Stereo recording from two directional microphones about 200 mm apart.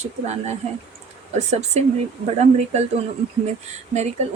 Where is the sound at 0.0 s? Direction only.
35° right (ahead or behind).